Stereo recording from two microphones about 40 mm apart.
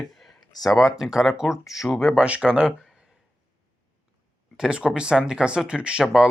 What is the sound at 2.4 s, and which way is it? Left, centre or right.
Speech, right.